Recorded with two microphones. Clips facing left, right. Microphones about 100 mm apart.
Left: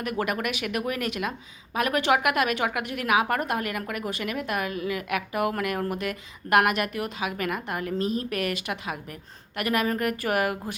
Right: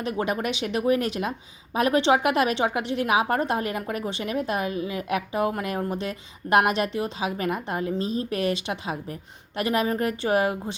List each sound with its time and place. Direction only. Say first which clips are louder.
0.0 s a woman's voice: right 2 dB; 30° right (ahead or behind)